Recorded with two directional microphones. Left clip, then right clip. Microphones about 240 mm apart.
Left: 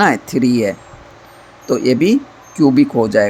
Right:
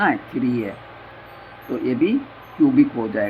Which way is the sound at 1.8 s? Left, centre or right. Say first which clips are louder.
Left 5 dB; left.